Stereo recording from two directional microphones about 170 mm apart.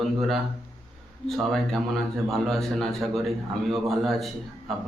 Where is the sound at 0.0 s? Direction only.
Centre (ahead or behind).